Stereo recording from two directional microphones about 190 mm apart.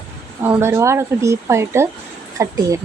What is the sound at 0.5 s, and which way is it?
A woman's voice, 15° right (ahead or behind).